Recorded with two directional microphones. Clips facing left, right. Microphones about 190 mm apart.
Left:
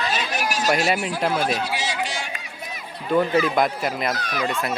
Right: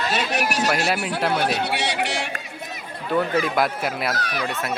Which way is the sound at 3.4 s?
5° right (ahead or behind).